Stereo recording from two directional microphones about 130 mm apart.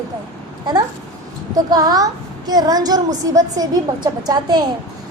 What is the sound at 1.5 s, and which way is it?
A woman's voice, 30° right (ahead or behind).